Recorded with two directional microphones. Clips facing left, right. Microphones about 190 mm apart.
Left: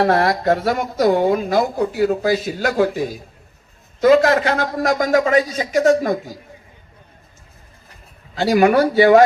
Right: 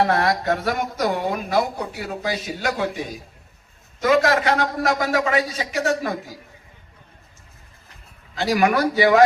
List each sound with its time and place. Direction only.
0.1 s speech: 35° left (ahead or behind)
4.3 s a man's voice: 35° left (ahead or behind)
8.4 s speech: 35° left (ahead or behind)